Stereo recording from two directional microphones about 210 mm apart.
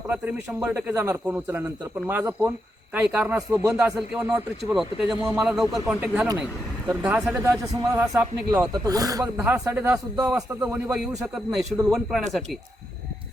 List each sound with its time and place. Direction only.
0.1 s a man's voice: 10° right (ahead or behind)
7.7 s a man's voice: 15° right (ahead or behind)